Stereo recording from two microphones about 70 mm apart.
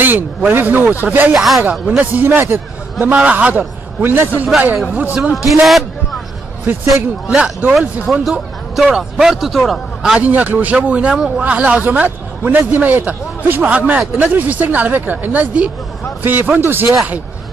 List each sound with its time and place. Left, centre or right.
0.0 s a man's voice: right
1.3 s a man's voice: centre
1.7 s a man's voice: right
3.1 s a man's voice: centre
4.0 s a man's voice: right
4.9 s a man's voice: right
5.3 s a man's voice: centre
6.7 s a man's voice: right
7.2 s speech: centre
8.1 s a man's voice: centre
10.2 s a man's voice: right